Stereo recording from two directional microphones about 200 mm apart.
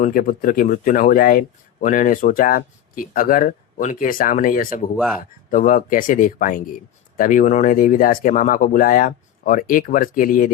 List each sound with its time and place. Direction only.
0.0 s speech: 45° left (ahead or behind)
4.9 s speech: 5° right (ahead or behind)
5.2 s speech: 40° left (ahead or behind)